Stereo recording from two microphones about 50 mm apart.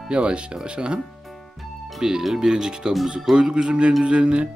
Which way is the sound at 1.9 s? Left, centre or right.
Centre.